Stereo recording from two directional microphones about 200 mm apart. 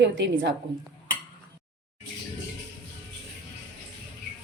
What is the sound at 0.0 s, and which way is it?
Speech, 65° right (ahead or behind).